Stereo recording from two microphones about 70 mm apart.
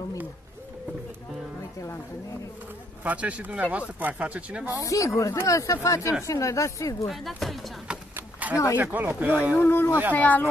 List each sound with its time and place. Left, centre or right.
3.0 s speech: right
4.6 s speech: left
7.1 s speech: centre
8.2 s a sound: right
8.8 s speech: right
9.6 s speech: left
10.1 s speech: left